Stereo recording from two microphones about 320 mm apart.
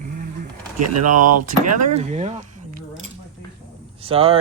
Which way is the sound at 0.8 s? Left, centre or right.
Right.